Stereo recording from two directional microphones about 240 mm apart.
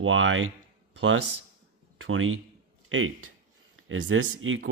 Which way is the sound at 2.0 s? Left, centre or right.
Right.